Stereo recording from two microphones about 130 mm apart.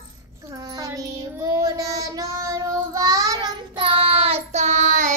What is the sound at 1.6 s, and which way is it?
Child singing, 25° right (ahead or behind).